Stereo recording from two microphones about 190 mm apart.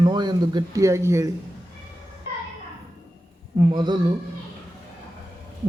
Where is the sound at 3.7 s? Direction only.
20° right (ahead or behind).